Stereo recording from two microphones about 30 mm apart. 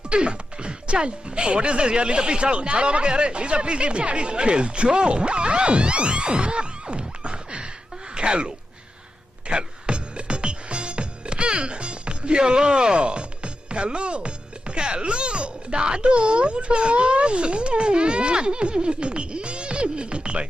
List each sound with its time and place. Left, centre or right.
0.1 s speech: right
8.1 s a sound: right
9.5 s music: right
14.8 s speech: right